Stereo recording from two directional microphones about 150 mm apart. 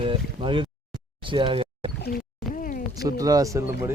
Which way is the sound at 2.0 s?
75° left (ahead or behind).